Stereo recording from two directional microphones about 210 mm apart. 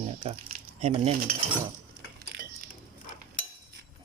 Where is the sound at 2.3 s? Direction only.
50° right (ahead or behind).